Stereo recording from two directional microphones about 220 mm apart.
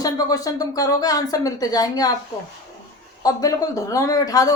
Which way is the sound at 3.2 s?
15° left (ahead or behind).